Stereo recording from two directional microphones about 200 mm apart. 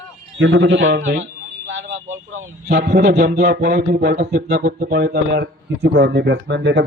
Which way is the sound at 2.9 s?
35° right (ahead or behind).